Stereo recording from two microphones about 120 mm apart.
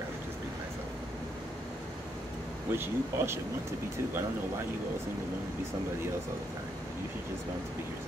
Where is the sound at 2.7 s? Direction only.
20° right (ahead or behind).